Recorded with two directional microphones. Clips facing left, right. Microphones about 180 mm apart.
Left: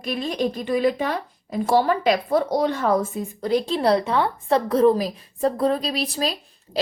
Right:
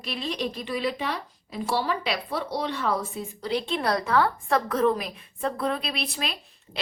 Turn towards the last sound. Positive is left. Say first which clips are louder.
# left 8 dB
turn(degrees=40)  # may be behind; listen again after turning